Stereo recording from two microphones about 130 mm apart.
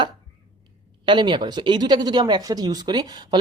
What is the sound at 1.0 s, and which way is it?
Speech, 35° right (ahead or behind).